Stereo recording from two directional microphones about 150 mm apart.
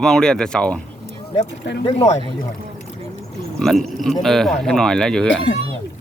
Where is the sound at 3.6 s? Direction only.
Centre (ahead or behind).